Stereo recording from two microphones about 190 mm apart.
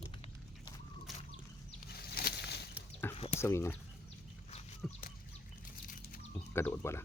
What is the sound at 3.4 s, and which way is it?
Speech, 15° left (ahead or behind).